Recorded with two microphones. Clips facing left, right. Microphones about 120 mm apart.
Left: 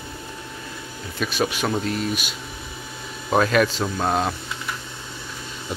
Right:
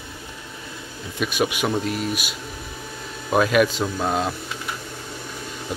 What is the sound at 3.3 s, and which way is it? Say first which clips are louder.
Speech: right 1 dB; 5° right (ahead or behind).